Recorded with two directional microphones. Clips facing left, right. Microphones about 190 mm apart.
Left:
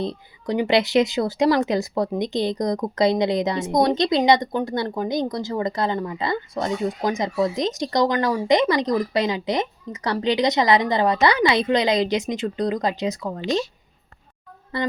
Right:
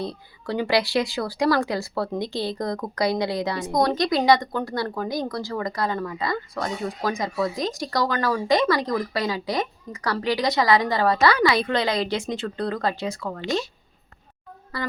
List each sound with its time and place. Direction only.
0.0 s speech: 20° left (ahead or behind)
14.7 s speech: 25° left (ahead or behind)